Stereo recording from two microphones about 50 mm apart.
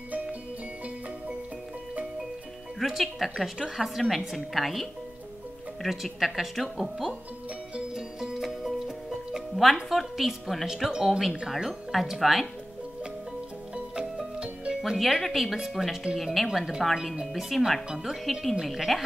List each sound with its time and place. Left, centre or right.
2.9 s speech: centre
7.7 s music: centre
9.8 s speech: centre
14.4 s music: centre
14.8 s speech: centre